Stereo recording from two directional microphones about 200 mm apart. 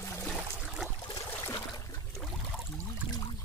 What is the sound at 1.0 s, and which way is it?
Trickle, 20° left (ahead or behind).